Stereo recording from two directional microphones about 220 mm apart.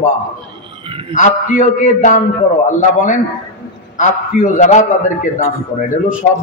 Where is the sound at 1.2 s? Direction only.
35° left (ahead or behind).